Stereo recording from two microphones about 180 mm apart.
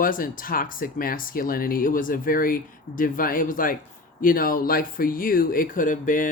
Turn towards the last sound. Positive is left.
turn(degrees=45)  # may be behind; listen again after turning